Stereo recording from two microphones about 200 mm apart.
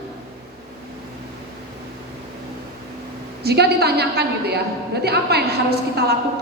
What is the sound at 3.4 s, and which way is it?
A woman's voice, 55° right (ahead or behind).